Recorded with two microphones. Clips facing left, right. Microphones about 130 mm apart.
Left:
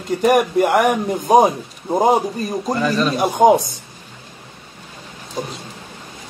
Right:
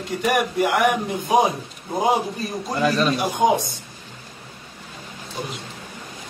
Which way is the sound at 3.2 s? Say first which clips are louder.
Left 10 dB; 45° left (ahead or behind).